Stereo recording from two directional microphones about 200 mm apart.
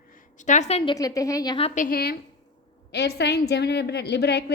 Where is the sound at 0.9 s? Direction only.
15° left (ahead or behind).